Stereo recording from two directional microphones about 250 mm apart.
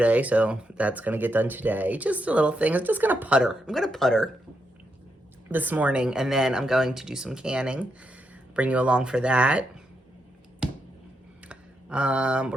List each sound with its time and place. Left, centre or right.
0.0 s speech: centre
5.5 s speech: centre
11.4 s a sound: centre